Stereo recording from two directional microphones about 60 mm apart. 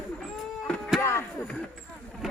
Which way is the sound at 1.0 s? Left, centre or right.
Left.